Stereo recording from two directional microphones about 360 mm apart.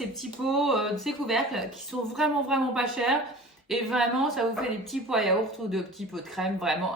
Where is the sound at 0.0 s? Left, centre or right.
Centre.